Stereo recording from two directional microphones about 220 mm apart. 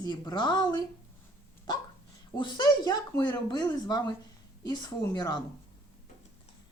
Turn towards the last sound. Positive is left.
turn(degrees=15)  # may be behind; listen again after turning